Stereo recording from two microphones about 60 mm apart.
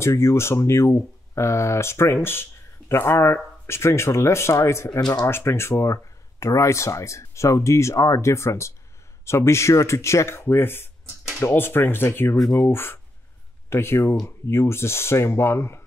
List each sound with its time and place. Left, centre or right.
0.0 s speech: left